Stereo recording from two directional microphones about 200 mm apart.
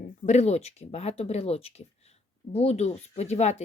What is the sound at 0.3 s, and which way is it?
Speech, 35° left (ahead or behind).